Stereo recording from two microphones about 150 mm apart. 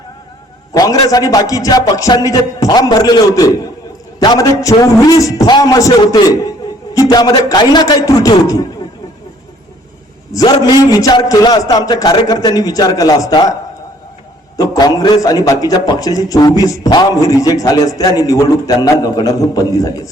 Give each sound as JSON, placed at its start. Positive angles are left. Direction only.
{"t": 0.7, "sound": "a man's voice", "side_deg": 25}
{"t": 10.3, "sound": "a man's voice", "side_deg": 25}
{"t": 14.5, "sound": "a man's voice", "side_deg": 25}